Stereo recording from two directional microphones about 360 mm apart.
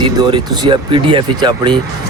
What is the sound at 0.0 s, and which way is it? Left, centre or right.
Speech, centre.